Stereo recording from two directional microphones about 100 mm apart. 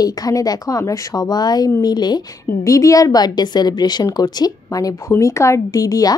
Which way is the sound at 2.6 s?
35° left (ahead or behind).